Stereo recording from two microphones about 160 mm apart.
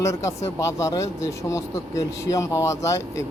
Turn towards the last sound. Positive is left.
turn(degrees=20)  # may be behind; listen again after turning